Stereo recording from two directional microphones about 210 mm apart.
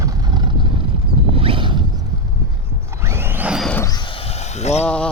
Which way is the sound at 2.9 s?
10° right (ahead or behind).